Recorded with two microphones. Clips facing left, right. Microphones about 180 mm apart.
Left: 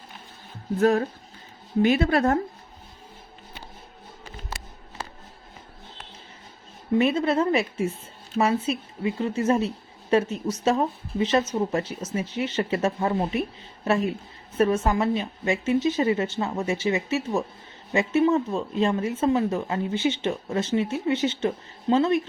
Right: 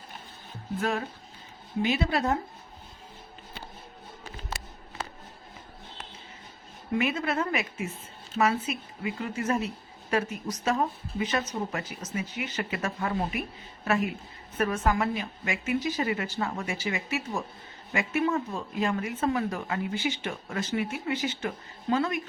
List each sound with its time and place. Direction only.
0.8 s a woman's voice: 40° left (ahead or behind)
7.0 s a woman's voice: 30° left (ahead or behind)